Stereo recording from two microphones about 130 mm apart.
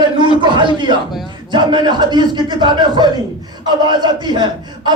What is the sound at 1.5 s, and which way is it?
Music, 35° right (ahead or behind).